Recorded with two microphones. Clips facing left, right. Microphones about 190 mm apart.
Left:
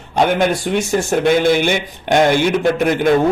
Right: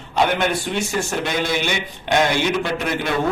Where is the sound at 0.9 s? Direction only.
50° left (ahead or behind).